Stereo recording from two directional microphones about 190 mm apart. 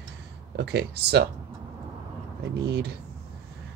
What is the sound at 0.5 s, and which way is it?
Speech, 60° right (ahead or behind).